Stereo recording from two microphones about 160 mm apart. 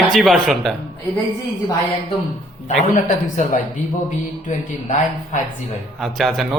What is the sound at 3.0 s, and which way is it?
Speech, 45° left (ahead or behind).